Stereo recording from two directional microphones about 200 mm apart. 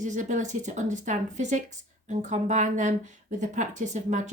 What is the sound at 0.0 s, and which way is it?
Speech, 40° right (ahead or behind).